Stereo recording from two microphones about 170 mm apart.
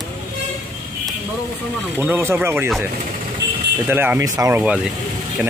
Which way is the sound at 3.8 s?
10° right (ahead or behind).